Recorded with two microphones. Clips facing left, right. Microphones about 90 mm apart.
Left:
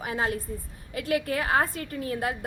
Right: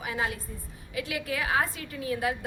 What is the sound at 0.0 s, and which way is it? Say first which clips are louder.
A woman's voice: left 3 dB; 45° left (ahead or behind).